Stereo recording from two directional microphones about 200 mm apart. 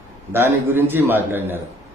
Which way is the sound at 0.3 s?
10° right (ahead or behind).